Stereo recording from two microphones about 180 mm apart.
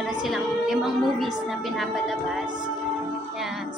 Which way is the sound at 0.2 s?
Centre (ahead or behind).